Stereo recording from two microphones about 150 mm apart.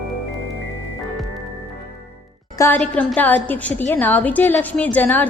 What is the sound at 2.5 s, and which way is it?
A woman's voice, 20° left (ahead or behind).